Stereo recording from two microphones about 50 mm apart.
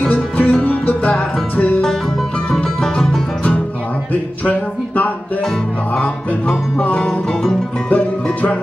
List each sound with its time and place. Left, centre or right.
0.1 s music: left
2.5 s music: centre
4.1 s a sound: left
5.9 s music: left